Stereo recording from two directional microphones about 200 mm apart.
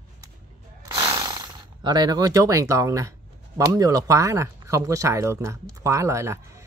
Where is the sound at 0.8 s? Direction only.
20° right (ahead or behind).